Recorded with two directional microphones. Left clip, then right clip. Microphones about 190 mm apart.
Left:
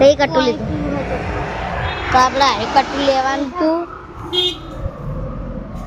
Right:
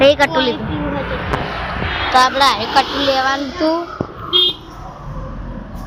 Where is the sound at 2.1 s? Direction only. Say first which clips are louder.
Right 1 dB; centre (ahead or behind).